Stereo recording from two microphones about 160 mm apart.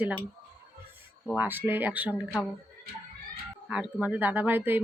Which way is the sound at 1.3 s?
10° right (ahead or behind).